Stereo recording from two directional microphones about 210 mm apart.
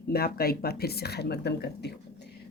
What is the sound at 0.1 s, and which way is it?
Speech, 45° left (ahead or behind).